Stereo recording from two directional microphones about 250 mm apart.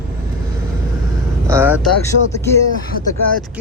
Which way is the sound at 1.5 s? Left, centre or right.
Centre.